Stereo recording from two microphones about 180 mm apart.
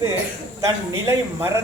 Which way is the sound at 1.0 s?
15° right (ahead or behind).